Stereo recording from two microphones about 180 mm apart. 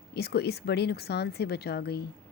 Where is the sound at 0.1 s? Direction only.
65° left (ahead or behind).